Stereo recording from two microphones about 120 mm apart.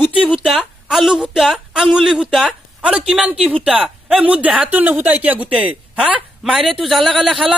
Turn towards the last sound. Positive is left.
turn(degrees=0)  # may be behind; listen again after turning